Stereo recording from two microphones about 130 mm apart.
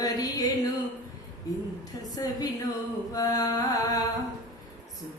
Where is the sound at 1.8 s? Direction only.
25° left (ahead or behind).